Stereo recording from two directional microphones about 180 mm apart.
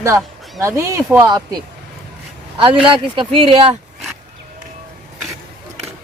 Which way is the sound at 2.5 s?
30° right (ahead or behind).